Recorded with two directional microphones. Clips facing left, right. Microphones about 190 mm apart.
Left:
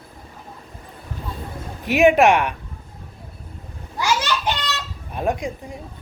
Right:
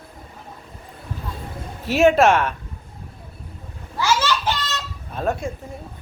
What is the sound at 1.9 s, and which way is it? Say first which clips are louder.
Speech: left 1 dB; 15° left (ahead or behind).